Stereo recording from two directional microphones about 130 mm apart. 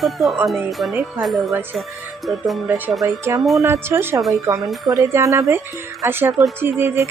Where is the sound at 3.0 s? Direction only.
25° right (ahead or behind).